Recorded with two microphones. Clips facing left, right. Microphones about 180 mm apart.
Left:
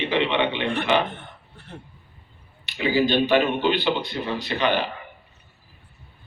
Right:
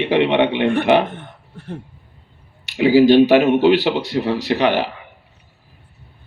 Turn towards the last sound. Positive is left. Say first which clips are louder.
# right 6 dB
turn(degrees=-80)